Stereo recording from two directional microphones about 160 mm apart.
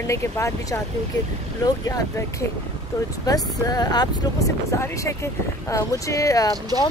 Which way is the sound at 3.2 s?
25° left (ahead or behind).